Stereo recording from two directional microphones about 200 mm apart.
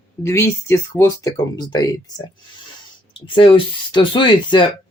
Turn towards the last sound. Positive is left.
turn(degrees=25)  # may be behind; listen again after turning